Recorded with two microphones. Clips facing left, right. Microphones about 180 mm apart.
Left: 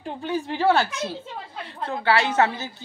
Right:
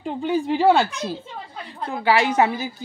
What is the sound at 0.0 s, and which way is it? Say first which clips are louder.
A woman's voice: right 5 dB; 15° right (ahead or behind).